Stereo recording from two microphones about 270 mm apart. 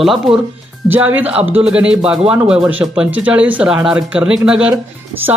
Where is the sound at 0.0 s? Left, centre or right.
Centre.